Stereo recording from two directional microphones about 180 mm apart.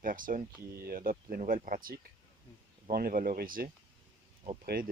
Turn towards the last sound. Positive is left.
turn(degrees=-55)  # may be behind; listen again after turning